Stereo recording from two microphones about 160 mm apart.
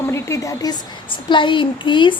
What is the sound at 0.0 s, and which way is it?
A woman's voice, 15° left (ahead or behind).